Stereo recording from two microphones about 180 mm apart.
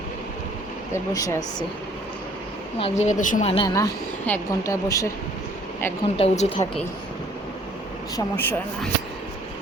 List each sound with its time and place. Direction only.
0.9 s speech: 15° left (ahead or behind)
2.7 s speech: 35° left (ahead or behind)
3.5 s speech: 25° left (ahead or behind)
6.1 s speech: 35° left (ahead or behind)
8.1 s speech: 10° left (ahead or behind)